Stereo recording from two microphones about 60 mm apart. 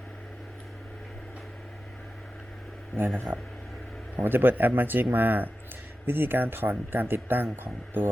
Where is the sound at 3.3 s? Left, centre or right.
Right.